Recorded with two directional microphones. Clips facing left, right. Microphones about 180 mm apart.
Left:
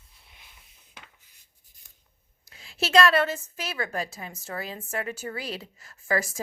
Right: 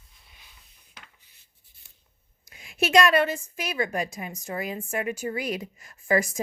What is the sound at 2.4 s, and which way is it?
A woman's voice, 15° right (ahead or behind).